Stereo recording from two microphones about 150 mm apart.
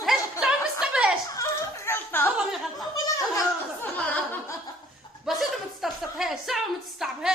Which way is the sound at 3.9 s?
10° left (ahead or behind).